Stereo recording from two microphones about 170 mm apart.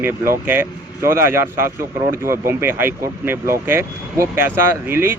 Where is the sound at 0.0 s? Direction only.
10° right (ahead or behind).